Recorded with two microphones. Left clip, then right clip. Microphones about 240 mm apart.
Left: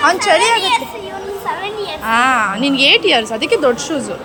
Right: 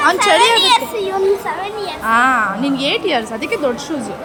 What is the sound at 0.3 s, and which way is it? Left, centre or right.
Speech, right.